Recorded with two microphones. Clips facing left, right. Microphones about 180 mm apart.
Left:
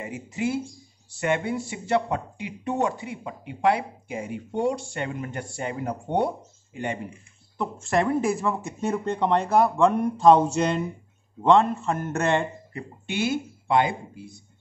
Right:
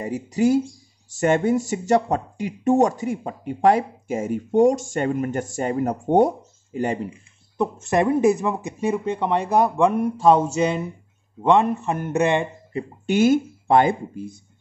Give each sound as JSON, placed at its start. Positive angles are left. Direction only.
{"t": 0.0, "sound": "speech", "side_deg": -40}
{"t": 7.8, "sound": "speech", "side_deg": -20}
{"t": 13.0, "sound": "speech", "side_deg": -45}